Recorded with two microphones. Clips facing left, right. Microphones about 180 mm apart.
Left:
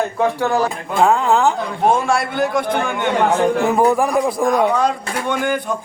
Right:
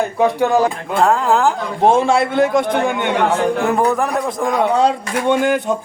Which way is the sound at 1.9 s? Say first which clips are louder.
Right 4 dB; 20° right (ahead or behind).